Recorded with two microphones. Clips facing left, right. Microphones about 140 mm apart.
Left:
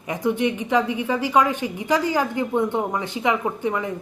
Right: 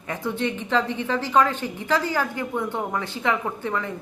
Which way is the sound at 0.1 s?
15° left (ahead or behind).